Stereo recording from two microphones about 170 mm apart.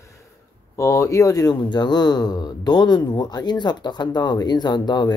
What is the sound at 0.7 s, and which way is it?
Speech, 15° left (ahead or behind).